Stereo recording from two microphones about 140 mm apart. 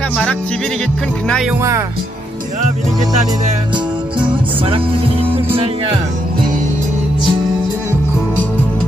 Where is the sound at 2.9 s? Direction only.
30° right (ahead or behind).